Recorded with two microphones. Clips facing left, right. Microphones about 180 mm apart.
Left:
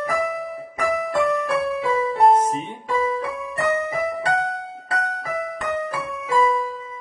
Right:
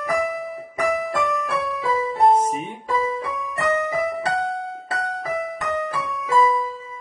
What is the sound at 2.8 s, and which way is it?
Keyboard, 30° left (ahead or behind).